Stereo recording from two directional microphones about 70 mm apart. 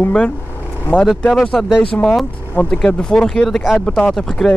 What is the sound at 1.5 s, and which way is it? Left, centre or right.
Speech, centre.